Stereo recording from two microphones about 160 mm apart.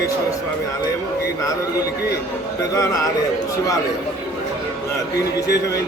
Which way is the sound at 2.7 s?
20° left (ahead or behind).